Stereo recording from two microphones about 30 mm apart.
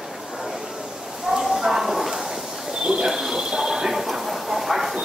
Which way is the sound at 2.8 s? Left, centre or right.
Right.